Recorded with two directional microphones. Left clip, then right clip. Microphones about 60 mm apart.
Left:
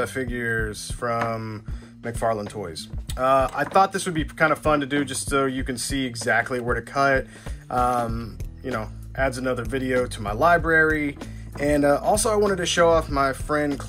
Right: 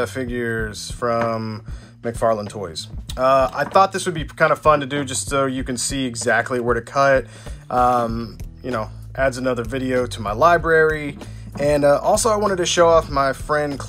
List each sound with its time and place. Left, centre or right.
0.0 s speech: right
7.8 s speech: right